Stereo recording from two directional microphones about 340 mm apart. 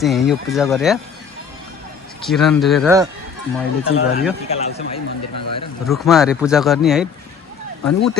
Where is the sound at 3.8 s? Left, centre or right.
Left.